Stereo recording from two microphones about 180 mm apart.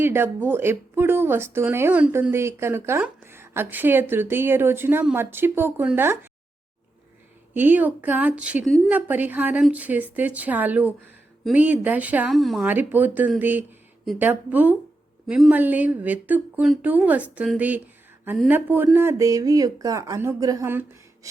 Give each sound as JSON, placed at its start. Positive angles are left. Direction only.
{"t": 0.0, "sound": "speech", "side_deg": -10}
{"t": 7.5, "sound": "speech", "side_deg": -10}